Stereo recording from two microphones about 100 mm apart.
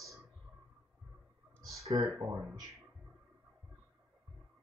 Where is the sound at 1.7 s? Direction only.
30° right (ahead or behind).